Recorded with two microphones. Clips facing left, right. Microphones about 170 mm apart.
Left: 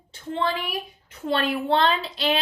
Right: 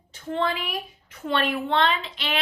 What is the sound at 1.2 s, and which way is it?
Speech, 35° left (ahead or behind).